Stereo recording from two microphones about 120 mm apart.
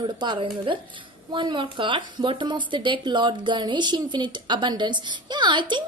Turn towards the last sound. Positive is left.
turn(degrees=-40)  # may be behind; listen again after turning